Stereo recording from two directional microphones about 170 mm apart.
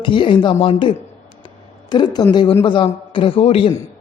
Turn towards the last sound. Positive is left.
turn(degrees=35)  # may be behind; listen again after turning